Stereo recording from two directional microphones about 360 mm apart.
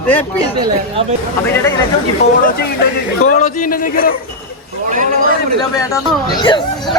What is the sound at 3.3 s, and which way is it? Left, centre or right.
Speech, left.